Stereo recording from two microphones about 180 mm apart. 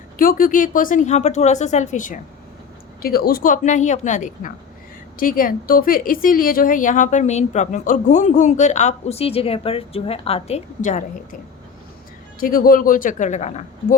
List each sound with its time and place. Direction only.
0.2 s a woman's voice: 50° left (ahead or behind)
3.0 s a woman's voice: 55° left (ahead or behind)
12.4 s a woman's voice: 50° left (ahead or behind)